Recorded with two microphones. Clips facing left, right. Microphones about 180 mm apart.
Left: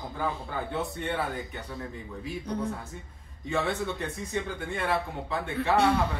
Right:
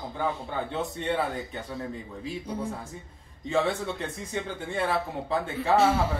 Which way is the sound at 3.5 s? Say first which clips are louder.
Right 2 dB; 30° right (ahead or behind).